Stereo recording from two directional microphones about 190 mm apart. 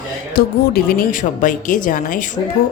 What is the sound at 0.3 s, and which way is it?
Speech, 50° left (ahead or behind).